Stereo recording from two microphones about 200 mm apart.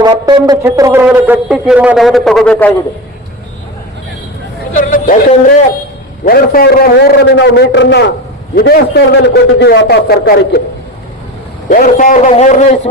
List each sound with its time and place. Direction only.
0.0 s speech: 20° right (ahead or behind); by 2.7 s 5° left (ahead or behind)
4.8 s a man's voice: 45° left (ahead or behind); by 8.0 s 60° left (ahead or behind)
8.5 s a man's voice: 50° left (ahead or behind)
11.7 s a man's voice: 40° left (ahead or behind)